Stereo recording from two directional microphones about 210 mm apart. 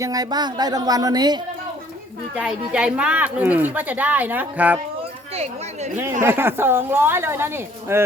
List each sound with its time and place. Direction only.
0.0 s speech: 15° right (ahead or behind)
2.3 s speech: 5° right (ahead or behind)
6.2 s speech: 10° right (ahead or behind)